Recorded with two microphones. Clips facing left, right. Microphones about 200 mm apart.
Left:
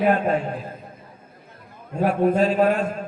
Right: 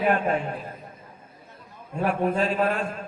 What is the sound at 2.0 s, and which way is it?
Speech, 40° left (ahead or behind).